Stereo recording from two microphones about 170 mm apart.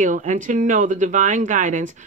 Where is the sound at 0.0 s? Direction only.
50° right (ahead or behind).